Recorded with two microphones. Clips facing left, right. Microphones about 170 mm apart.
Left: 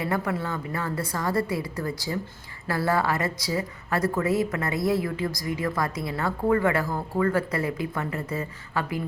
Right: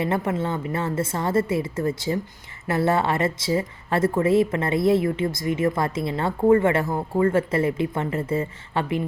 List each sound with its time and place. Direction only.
0.0 s a woman's voice: 25° right (ahead or behind)